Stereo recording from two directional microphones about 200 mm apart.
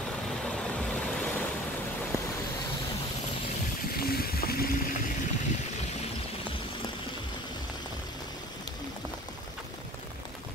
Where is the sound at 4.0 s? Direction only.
50° left (ahead or behind).